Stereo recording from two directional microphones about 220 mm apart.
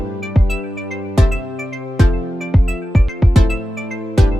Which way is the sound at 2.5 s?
Centre (ahead or behind).